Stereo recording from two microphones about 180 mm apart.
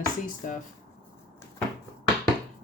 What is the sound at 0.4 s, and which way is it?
Speech, 45° left (ahead or behind).